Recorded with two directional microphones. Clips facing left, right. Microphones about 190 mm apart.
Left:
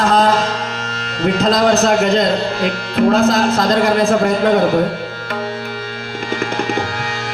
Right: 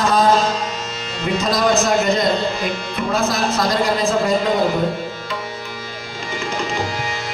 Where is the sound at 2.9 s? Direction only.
60° left (ahead or behind).